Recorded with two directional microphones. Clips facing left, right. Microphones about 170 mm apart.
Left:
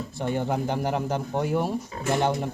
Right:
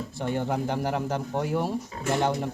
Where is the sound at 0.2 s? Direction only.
20° left (ahead or behind).